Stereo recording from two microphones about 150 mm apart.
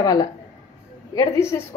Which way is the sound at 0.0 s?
25° left (ahead or behind).